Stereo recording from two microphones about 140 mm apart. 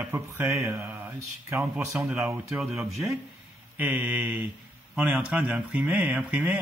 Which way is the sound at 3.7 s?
10° right (ahead or behind).